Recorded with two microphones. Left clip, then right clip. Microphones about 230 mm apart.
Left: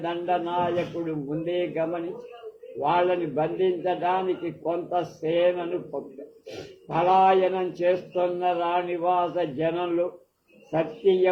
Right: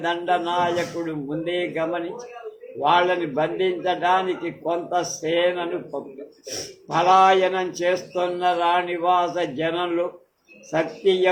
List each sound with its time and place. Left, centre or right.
0.0 s a man's voice: right
6.9 s a man's voice: right